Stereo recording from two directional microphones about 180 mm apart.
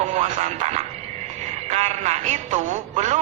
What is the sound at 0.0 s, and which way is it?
Speech, 40° right (ahead or behind).